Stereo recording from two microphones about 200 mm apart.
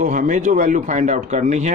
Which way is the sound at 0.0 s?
40° right (ahead or behind).